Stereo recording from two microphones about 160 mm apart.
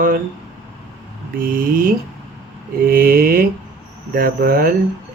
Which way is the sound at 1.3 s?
60° right (ahead or behind).